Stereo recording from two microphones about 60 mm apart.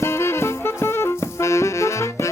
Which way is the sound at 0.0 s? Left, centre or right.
Left.